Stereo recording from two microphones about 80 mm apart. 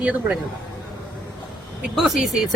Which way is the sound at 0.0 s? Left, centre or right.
Centre.